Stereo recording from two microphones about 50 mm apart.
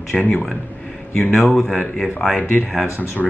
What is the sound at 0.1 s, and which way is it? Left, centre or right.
Speech, left.